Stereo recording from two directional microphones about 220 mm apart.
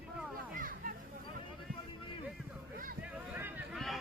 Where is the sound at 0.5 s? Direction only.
40° right (ahead or behind).